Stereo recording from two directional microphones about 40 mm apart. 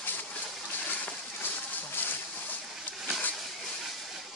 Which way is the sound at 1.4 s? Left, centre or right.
Left.